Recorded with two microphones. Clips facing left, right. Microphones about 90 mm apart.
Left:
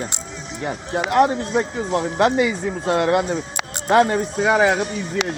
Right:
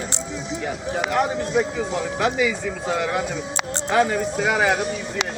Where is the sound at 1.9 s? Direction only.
55° left (ahead or behind).